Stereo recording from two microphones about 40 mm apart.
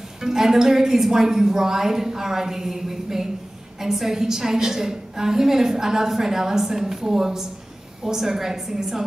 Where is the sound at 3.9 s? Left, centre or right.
Centre.